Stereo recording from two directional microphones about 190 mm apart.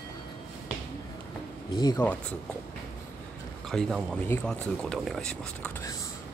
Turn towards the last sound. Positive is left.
turn(degrees=5)  # may be behind; listen again after turning